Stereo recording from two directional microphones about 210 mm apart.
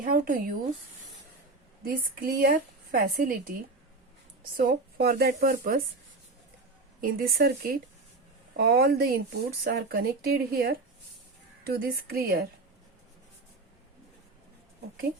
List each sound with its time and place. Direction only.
0.0 s speech: 40° right (ahead or behind)
1.8 s speech: 40° right (ahead or behind)
4.5 s speech: 45° right (ahead or behind)
7.0 s speech: 45° right (ahead or behind)